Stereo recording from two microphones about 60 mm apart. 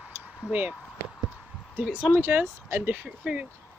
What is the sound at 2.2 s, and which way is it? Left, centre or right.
Speech, right.